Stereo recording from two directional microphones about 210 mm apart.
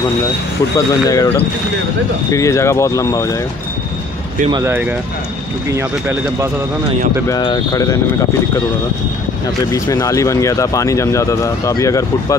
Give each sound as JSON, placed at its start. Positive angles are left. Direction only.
{"t": 0.7, "sound": "speech", "side_deg": 15}
{"t": 2.3, "sound": "speech", "side_deg": 15}
{"t": 4.5, "sound": "speech", "side_deg": -15}
{"t": 7.2, "sound": "speech", "side_deg": 20}
{"t": 9.7, "sound": "speech", "side_deg": 15}